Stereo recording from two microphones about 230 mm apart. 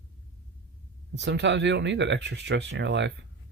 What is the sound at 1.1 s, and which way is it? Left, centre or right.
Speech, right.